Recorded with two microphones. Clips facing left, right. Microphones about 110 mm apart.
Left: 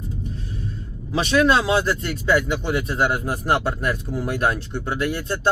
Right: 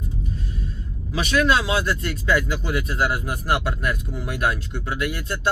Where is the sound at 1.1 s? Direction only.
35° left (ahead or behind).